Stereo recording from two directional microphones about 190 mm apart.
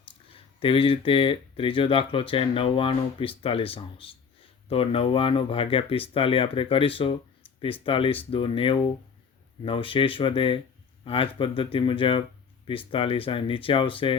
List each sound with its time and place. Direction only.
0.3 s speech: 30° left (ahead or behind)